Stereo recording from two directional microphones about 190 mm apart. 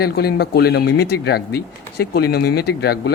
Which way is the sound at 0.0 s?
55° left (ahead or behind).